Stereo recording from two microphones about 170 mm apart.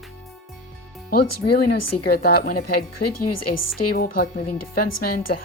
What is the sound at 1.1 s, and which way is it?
Speech, 60° left (ahead or behind).